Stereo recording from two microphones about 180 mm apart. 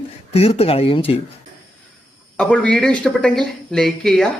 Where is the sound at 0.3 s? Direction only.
35° left (ahead or behind).